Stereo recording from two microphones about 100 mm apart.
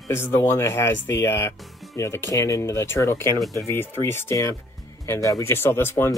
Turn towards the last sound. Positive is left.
turn(degrees=25)  # may be behind; listen again after turning